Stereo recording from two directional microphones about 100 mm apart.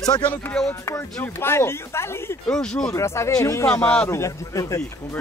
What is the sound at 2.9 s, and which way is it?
A man's voice, 25° left (ahead or behind).